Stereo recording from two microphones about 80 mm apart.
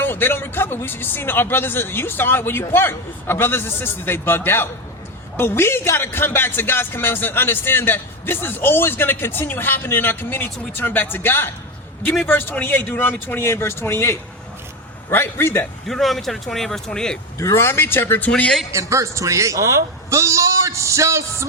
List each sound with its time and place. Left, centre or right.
0.0 s speech: left
15.9 s speech: centre
17.3 s speech: left
18.3 s a man's voice: centre
18.7 s speech: right